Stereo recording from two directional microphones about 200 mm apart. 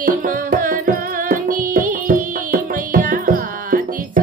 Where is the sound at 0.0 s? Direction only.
40° right (ahead or behind).